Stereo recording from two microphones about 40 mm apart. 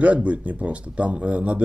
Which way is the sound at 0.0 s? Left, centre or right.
Right.